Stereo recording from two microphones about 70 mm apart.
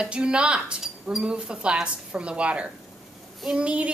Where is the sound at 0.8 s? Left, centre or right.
Centre.